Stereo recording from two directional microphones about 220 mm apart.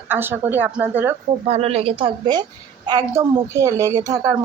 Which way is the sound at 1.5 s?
25° right (ahead or behind).